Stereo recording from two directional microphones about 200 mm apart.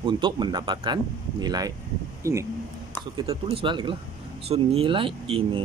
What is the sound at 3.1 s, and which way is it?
Speech, 25° right (ahead or behind).